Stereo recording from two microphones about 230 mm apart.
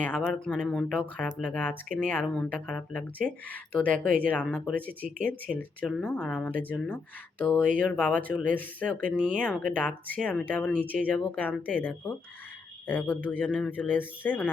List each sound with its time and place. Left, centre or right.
0.0 s speech: centre
5.0 s speech: right
5.5 s speech: centre